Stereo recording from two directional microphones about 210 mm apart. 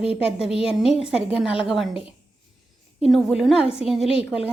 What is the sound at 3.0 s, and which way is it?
A woman's voice, centre (ahead or behind).